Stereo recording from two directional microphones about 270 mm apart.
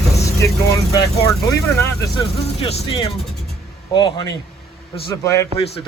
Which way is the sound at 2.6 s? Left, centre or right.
Centre.